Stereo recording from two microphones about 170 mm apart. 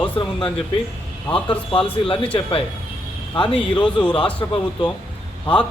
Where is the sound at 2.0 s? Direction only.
30° left (ahead or behind).